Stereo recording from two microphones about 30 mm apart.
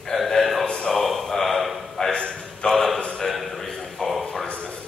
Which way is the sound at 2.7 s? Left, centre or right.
Centre.